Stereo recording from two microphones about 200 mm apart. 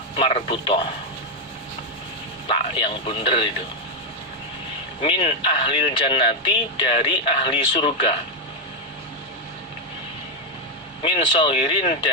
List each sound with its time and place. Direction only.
0.2 s speech: 30° left (ahead or behind)
2.5 s speech: 25° left (ahead or behind)
5.0 s speech: 25° left (ahead or behind)
11.0 s speech: 25° left (ahead or behind)